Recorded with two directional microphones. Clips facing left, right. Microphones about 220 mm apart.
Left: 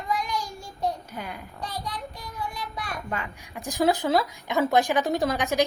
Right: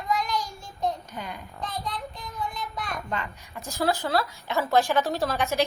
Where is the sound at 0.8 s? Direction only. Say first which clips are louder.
Even; 10° left (ahead or behind).